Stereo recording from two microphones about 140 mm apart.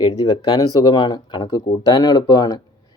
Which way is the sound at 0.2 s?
30° left (ahead or behind).